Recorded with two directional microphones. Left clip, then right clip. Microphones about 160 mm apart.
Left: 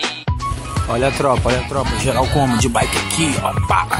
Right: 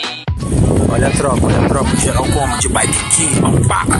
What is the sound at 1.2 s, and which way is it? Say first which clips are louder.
Speech: right 2 dB; 5° right (ahead or behind).